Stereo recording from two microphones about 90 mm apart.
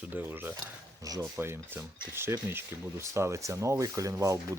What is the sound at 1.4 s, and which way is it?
Speech, 25° right (ahead or behind).